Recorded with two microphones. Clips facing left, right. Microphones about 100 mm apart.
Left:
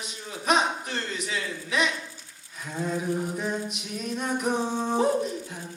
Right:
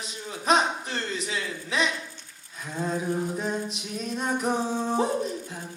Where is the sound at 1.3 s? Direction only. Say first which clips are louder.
Even; 30° right (ahead or behind).